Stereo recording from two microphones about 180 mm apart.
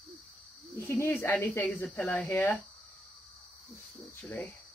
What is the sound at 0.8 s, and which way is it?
Speech, 10° left (ahead or behind).